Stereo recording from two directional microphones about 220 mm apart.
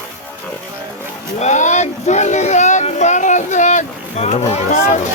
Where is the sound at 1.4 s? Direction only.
30° left (ahead or behind).